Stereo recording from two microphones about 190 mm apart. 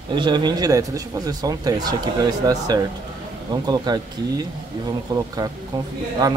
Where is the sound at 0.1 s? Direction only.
25° right (ahead or behind).